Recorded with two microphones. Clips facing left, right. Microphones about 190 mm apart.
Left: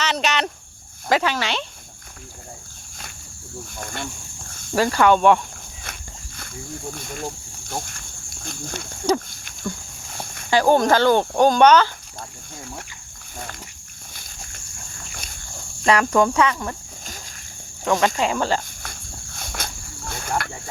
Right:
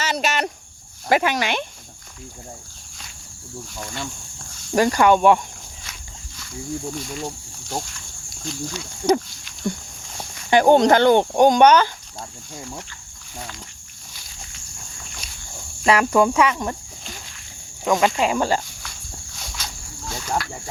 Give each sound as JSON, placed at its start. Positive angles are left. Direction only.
{"t": 0.1, "sound": "a sound", "side_deg": -10}
{"t": 1.1, "sound": "cricket", "side_deg": -15}
{"t": 3.8, "sound": "speech", "side_deg": 55}
{"t": 4.7, "sound": "cricket", "side_deg": -15}
{"t": 6.9, "sound": "speech", "side_deg": 50}
{"t": 10.5, "sound": "speech", "side_deg": -20}
{"t": 15.1, "sound": "walk", "side_deg": 50}
{"t": 15.8, "sound": "cricket", "side_deg": -10}
{"t": 17.8, "sound": "cricket", "side_deg": -15}
{"t": 18.8, "sound": "cricket", "side_deg": 50}